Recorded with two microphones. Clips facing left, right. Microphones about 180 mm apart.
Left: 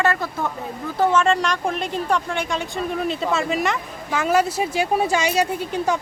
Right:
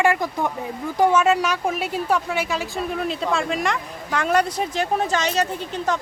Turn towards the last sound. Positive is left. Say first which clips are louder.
# left 2 dB
turn(degrees=10)  # may be behind; listen again after turning